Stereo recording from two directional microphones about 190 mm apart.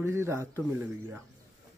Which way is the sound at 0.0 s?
15° right (ahead or behind).